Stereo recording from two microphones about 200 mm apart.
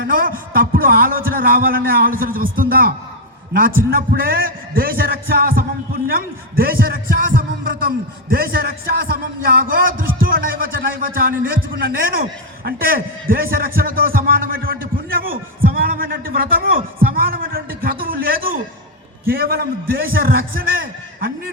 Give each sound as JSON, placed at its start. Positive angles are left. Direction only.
{"t": 0.1, "sound": "a man's voice", "side_deg": -45}